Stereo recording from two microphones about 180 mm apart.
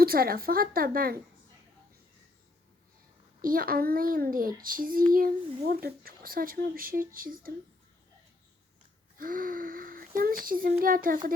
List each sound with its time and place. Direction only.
0.0 s a woman's voice: 55° right (ahead or behind)
3.4 s speech: 50° right (ahead or behind)
9.1 s speech: 50° right (ahead or behind)